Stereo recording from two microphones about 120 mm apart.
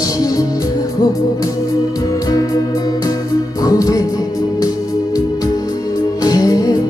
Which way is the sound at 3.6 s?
30° left (ahead or behind).